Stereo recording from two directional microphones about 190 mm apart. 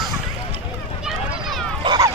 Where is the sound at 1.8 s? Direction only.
20° right (ahead or behind).